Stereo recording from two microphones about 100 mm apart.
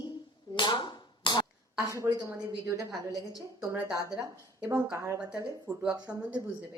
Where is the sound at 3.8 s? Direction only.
30° left (ahead or behind).